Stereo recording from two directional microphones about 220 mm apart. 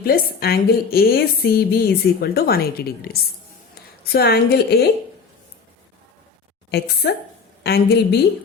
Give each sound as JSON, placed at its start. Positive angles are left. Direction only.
{"t": 0.0, "sound": "a woman's voice", "side_deg": 45}
{"t": 6.7, "sound": "a woman's voice", "side_deg": 45}